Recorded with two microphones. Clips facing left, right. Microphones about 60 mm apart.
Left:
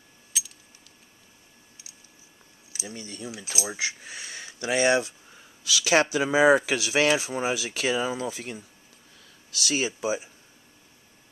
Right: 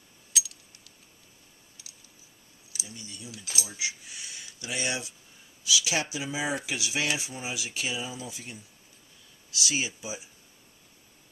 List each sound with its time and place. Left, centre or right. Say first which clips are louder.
0.3 s coin: right 2 dB; centre
2.9 s speech: left 8 dB; left
5.6 s speech: left 7 dB; left